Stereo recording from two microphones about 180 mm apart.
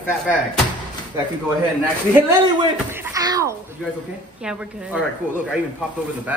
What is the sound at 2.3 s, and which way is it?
Speech, 15° right (ahead or behind).